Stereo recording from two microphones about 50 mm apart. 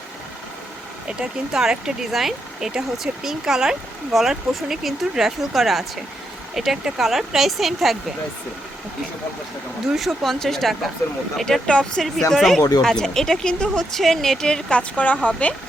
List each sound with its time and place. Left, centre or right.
1.0 s speech: centre
9.9 s speech: centre
13.7 s a woman's voice: centre; by 15.5 s left